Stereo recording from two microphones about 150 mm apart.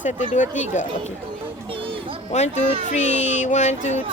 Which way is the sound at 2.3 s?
50° left (ahead or behind).